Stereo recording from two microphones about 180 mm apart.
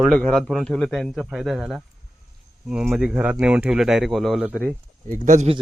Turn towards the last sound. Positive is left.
turn(degrees=-40)  # may be behind; listen again after turning